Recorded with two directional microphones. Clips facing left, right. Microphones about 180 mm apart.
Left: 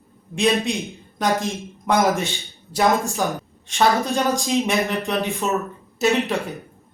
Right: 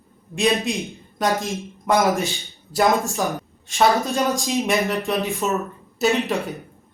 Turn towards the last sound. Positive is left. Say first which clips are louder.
# even
turn(degrees=0)  # may be behind; listen again after turning